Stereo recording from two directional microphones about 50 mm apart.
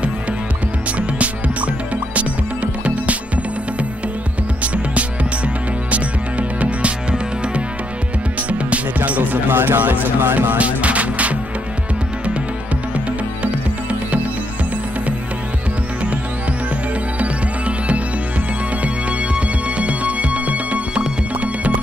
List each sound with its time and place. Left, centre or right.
0.9 s music: right
6.6 s music: right
9.6 s speech: right
10.6 s music: right
17.2 s music: right
19.3 s music: right